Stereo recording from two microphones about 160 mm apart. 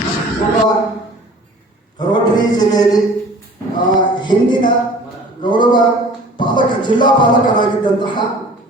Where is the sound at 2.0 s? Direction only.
25° left (ahead or behind).